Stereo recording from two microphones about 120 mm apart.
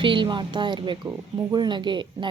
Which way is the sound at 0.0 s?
45° right (ahead or behind).